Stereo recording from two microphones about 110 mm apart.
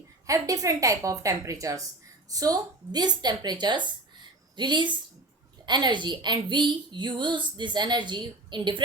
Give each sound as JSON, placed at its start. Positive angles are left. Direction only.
{"t": 0.3, "sound": "a woman's voice", "side_deg": -30}